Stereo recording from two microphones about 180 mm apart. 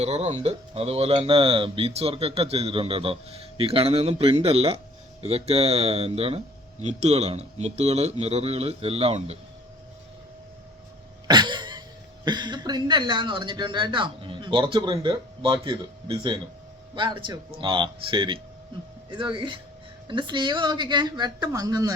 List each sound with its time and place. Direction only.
0.0 s speech: 35° right (ahead or behind)
11.3 s a sound: 25° right (ahead or behind)
12.2 s speech: 25° right (ahead or behind)